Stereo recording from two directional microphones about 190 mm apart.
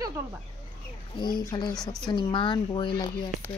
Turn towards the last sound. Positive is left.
turn(degrees=25)  # may be behind; listen again after turning